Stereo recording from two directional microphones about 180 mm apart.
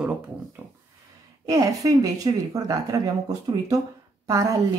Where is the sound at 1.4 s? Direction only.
20° right (ahead or behind).